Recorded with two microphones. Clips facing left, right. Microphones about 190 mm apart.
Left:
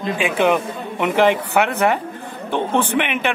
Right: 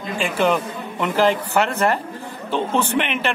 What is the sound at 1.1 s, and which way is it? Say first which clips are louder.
Speech: left 2 dB; 60° left (ahead or behind).